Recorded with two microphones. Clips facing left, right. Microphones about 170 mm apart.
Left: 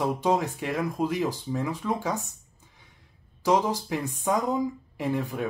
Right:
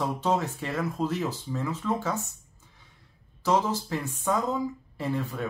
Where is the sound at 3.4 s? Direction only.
15° left (ahead or behind).